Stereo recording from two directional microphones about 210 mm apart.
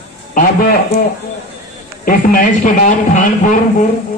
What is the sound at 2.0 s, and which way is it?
A man's voice, 40° left (ahead or behind).